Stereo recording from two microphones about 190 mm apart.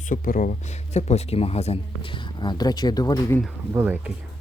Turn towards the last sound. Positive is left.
turn(degrees=-10)  # may be behind; listen again after turning